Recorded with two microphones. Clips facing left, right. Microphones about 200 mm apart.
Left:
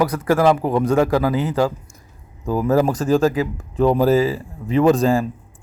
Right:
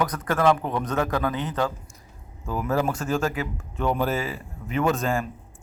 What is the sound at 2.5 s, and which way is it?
A man's voice, 40° left (ahead or behind).